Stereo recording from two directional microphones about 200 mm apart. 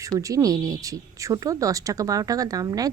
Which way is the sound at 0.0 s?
15° right (ahead or behind).